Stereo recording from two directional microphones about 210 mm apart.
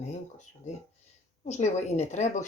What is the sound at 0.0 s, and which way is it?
A woman's voice, 35° left (ahead or behind).